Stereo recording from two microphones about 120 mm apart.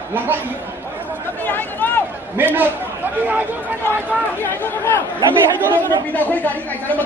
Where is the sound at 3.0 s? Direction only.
15° right (ahead or behind).